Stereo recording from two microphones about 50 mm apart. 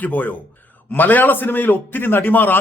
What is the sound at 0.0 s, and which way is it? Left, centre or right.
A man's voice, left.